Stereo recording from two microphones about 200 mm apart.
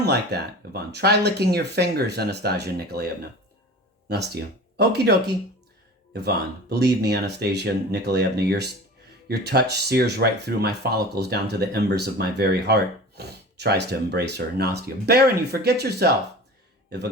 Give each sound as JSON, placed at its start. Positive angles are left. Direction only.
{"t": 0.0, "sound": "speech", "side_deg": -55}
{"t": 4.1, "sound": "speech", "side_deg": -55}